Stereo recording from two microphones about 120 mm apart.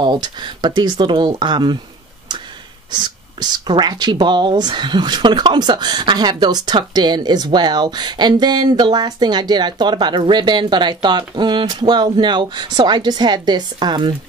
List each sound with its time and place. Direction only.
0.0 s speech: 40° right (ahead or behind)
2.9 s speech: 35° right (ahead or behind)